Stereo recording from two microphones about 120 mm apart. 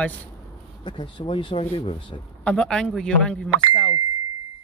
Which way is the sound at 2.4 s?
10° left (ahead or behind).